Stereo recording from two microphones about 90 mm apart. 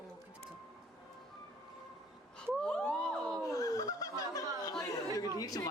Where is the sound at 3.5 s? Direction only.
40° left (ahead or behind).